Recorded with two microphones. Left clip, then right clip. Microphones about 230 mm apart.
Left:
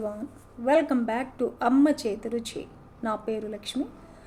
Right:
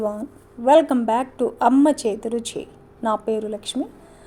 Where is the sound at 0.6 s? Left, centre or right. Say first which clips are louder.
Right 8 dB; right.